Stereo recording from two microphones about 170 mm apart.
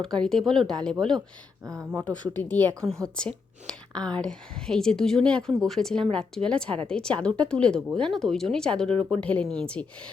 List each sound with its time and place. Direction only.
0.0 s speech: 5° left (ahead or behind)
1.6 s speech: 20° right (ahead or behind)
2.0 s a woman's voice: 10° left (ahead or behind)